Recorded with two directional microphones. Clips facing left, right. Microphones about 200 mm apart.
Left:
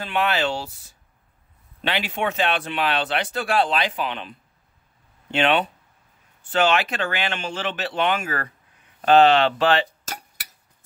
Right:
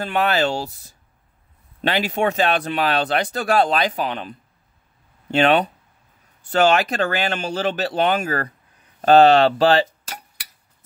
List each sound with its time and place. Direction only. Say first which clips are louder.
0.0 s speech: right 3 dB; 40° right (ahead or behind)